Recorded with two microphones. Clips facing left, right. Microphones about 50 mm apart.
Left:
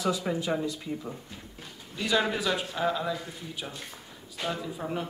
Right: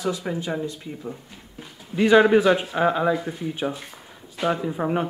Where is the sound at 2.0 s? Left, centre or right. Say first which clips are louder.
Right 12 dB; right.